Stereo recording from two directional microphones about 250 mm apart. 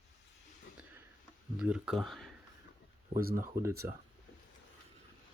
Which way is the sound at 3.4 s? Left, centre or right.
Centre.